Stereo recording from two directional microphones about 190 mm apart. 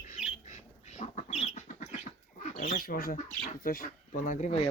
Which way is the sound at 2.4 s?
40° left (ahead or behind).